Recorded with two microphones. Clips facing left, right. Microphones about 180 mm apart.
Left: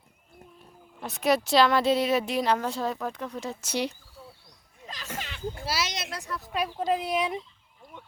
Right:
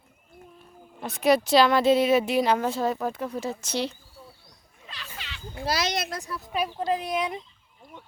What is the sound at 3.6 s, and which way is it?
Speech, 15° left (ahead or behind).